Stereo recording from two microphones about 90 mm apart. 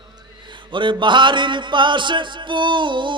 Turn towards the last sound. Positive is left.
turn(degrees=-60)  # may be behind; listen again after turning